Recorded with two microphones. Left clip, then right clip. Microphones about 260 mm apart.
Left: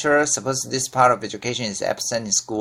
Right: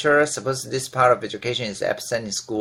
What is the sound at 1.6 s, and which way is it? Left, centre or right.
Speech, left.